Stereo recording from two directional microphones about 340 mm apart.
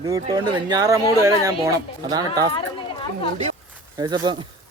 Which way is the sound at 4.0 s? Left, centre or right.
Centre.